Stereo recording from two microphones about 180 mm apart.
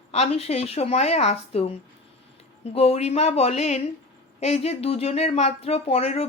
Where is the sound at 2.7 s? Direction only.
35° left (ahead or behind).